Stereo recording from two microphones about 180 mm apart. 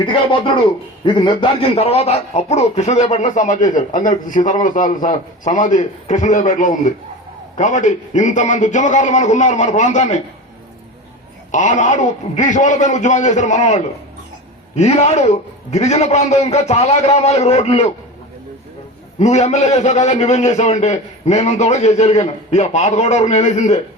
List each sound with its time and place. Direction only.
0.0 s a man's voice: 30° left (ahead or behind)
11.5 s a man's voice: 45° left (ahead or behind)
19.2 s a man's voice: 40° left (ahead or behind)